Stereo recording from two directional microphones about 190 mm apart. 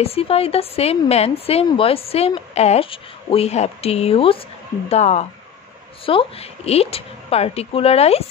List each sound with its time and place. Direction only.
0.0 s a woman's voice: 30° left (ahead or behind)